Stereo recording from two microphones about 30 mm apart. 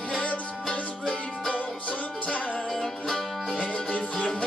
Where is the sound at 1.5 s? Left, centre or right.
Left.